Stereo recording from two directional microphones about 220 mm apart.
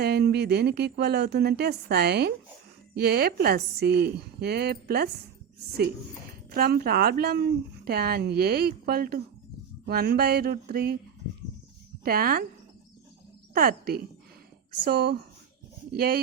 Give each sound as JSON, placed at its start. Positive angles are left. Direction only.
{"t": 0.0, "sound": "speech", "side_deg": -45}
{"t": 6.5, "sound": "speech", "side_deg": -45}
{"t": 12.0, "sound": "speech", "side_deg": -40}
{"t": 13.5, "sound": "speech", "side_deg": -40}